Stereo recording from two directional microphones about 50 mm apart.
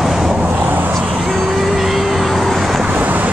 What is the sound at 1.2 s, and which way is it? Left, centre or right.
Vehicle, centre.